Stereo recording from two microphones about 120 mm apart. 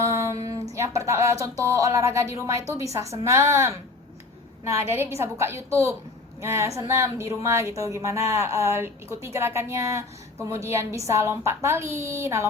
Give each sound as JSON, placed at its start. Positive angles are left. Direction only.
{"t": 0.0, "sound": "a sound", "side_deg": -25}
{"t": 3.2, "sound": "a woman's voice", "side_deg": -20}
{"t": 4.9, "sound": "a woman's voice", "side_deg": -20}